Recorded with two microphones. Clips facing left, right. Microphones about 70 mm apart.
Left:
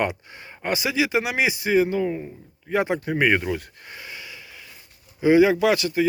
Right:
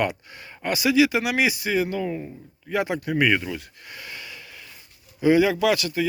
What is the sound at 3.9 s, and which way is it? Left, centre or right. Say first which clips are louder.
Wheeze: even; centre.